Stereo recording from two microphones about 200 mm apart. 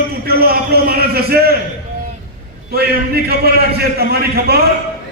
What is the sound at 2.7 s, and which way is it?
A man's voice, 50° right (ahead or behind).